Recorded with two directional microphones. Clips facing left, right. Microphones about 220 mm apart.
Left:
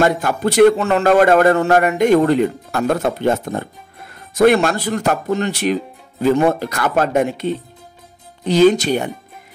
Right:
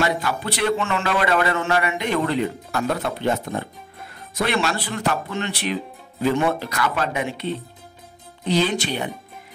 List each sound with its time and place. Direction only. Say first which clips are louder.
0.0 s a man's voice: left 7 dB; 50° left (ahead or behind)